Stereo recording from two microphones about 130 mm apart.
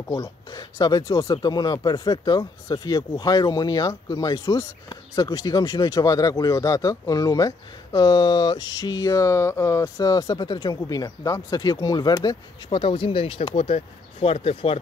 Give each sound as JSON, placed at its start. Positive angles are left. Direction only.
{"t": 0.1, "sound": "speech", "side_deg": 25}